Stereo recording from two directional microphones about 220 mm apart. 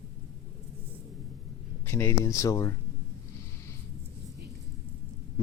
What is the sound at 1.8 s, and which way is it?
Speech, 10° left (ahead or behind).